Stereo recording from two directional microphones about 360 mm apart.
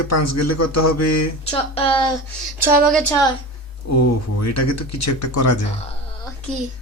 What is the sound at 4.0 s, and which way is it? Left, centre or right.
Speech, left.